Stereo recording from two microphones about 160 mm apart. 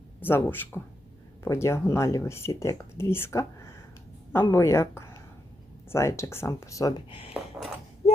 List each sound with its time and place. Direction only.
0.2 s speech: 15° left (ahead or behind); by 7.3 s 35° left (ahead or behind)